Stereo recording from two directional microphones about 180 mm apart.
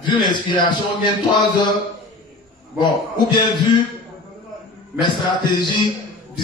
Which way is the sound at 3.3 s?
25° left (ahead or behind).